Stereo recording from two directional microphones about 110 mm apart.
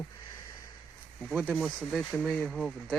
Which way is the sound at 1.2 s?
5° right (ahead or behind).